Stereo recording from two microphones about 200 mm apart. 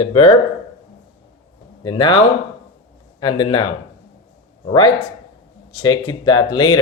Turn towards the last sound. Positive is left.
turn(degrees=25)  # may be behind; listen again after turning